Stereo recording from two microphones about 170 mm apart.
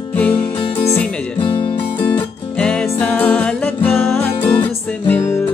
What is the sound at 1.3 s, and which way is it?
Music, 30° left (ahead or behind).